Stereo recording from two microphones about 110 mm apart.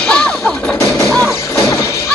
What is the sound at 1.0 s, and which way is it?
Music, centre (ahead or behind).